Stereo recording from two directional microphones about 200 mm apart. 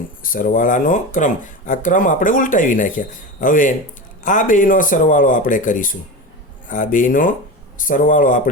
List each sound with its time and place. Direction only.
0.2 s speech: 45° left (ahead or behind)